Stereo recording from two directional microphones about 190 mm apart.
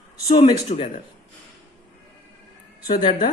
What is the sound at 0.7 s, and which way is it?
Speech, 35° left (ahead or behind).